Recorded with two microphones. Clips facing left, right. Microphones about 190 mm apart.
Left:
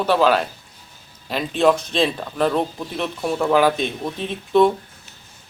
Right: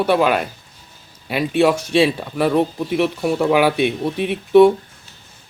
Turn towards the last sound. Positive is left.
turn(degrees=-15)  # may be behind; listen again after turning